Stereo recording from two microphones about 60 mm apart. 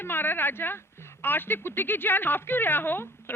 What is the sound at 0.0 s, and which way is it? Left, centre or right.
Speech, left.